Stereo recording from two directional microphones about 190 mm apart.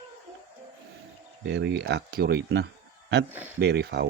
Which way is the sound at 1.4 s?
65° right (ahead or behind).